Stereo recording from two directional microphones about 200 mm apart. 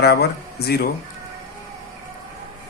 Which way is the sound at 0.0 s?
55° left (ahead or behind).